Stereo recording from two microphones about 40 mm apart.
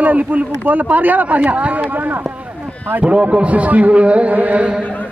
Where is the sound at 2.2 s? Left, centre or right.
Right.